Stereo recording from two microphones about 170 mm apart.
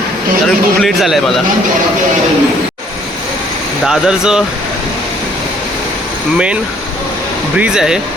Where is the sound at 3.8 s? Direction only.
5° right (ahead or behind).